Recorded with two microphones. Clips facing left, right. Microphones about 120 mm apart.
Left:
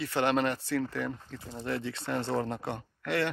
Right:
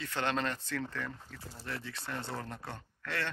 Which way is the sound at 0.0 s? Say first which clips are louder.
Left 6 dB; 10° left (ahead or behind).